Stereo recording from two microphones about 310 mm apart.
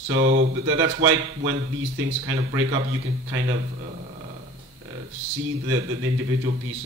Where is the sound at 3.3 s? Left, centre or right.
Right.